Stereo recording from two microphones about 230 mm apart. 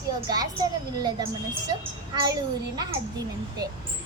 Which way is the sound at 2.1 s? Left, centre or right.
Centre.